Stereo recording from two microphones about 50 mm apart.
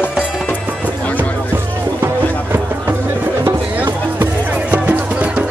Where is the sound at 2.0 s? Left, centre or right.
Right.